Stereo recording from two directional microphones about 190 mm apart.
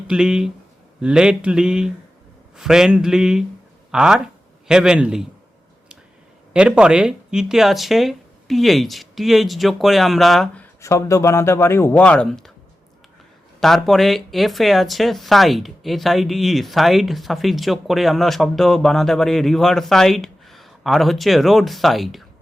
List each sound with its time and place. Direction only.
0.1 s speech: 5° right (ahead or behind)
6.5 s speech: 5° right (ahead or behind)
13.6 s speech: centre (ahead or behind)